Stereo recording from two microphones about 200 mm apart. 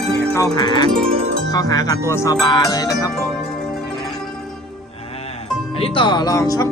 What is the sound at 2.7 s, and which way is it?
Speech, 20° left (ahead or behind).